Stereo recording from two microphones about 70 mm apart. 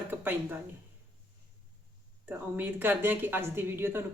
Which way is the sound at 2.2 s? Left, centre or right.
Right.